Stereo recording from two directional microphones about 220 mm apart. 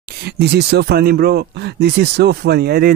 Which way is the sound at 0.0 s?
45° right (ahead or behind).